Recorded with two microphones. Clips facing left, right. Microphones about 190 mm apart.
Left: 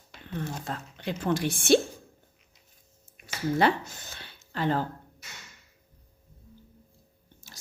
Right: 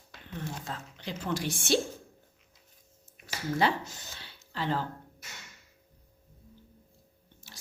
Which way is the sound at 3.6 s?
60° left (ahead or behind).